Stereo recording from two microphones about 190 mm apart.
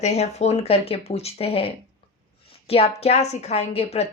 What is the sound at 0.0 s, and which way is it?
A woman's voice, 35° left (ahead or behind).